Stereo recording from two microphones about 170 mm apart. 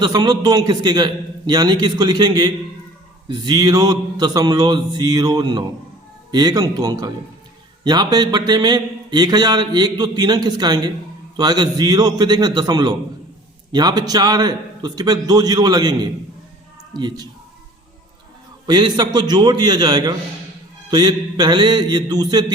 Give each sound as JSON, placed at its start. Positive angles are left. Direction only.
{"t": 0.0, "sound": "speech", "side_deg": -25}
{"t": 18.6, "sound": "speech", "side_deg": -25}